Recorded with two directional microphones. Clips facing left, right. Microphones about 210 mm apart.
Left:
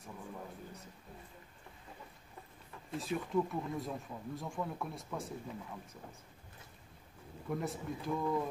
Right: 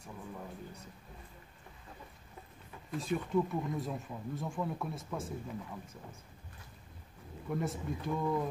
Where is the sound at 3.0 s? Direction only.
Centre (ahead or behind).